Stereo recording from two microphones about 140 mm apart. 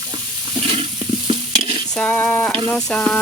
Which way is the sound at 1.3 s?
50° right (ahead or behind).